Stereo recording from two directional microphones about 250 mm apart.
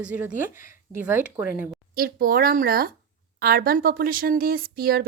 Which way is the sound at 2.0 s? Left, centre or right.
Right.